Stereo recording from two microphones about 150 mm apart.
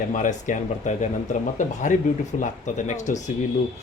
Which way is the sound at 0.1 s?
60° left (ahead or behind).